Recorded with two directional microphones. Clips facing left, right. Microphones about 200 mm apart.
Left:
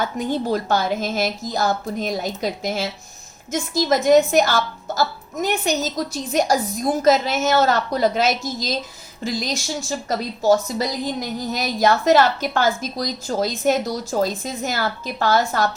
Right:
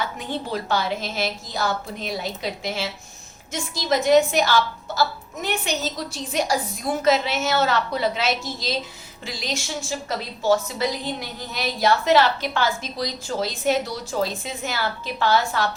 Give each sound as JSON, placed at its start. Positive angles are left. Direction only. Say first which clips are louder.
{"t": 0.0, "sound": "a woman's voice", "louder": "left 6 dB", "side_deg": 45}